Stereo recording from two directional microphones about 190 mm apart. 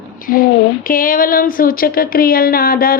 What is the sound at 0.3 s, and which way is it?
Speech, 50° left (ahead or behind).